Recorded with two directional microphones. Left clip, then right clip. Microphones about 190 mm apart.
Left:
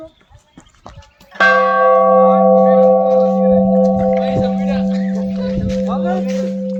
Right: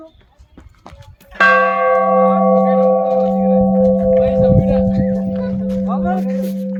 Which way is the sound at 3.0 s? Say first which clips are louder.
Left 3 dB; 25° right (ahead or behind).